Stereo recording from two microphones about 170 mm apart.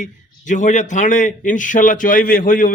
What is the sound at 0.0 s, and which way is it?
A man's voice, 45° left (ahead or behind).